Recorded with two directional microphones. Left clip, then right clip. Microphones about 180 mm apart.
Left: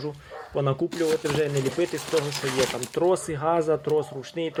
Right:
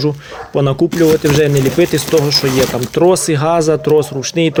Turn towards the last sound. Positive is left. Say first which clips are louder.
# right 15 dB
turn(degrees=-15)  # may be behind; listen again after turning